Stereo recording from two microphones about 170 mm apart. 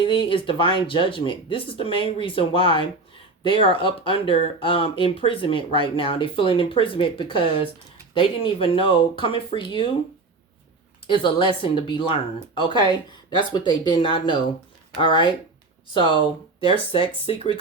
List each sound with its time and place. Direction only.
0.0 s speech: 30° left (ahead or behind)
11.0 s speech: 30° left (ahead or behind)
16.6 s speech: 30° left (ahead or behind)